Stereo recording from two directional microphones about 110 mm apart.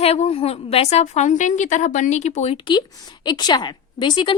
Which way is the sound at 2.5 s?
45° left (ahead or behind).